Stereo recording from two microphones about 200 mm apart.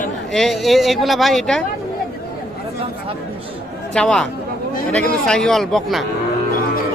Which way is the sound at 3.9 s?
5° left (ahead or behind).